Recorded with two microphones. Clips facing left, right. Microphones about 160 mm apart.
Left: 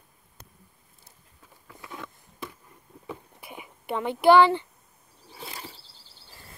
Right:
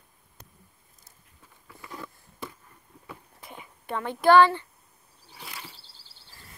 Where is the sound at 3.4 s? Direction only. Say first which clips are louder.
Left 2 dB; 15° left (ahead or behind).